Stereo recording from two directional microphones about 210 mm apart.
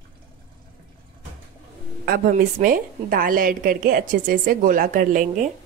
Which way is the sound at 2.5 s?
45° right (ahead or behind).